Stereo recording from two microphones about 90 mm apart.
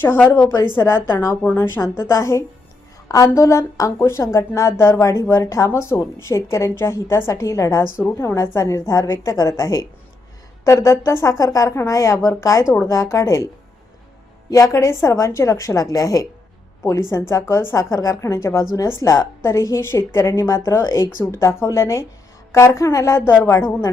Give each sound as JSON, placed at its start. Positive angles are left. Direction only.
{"t": 0.0, "sound": "a woman's voice", "side_deg": 25}
{"t": 14.5, "sound": "a woman's voice", "side_deg": 35}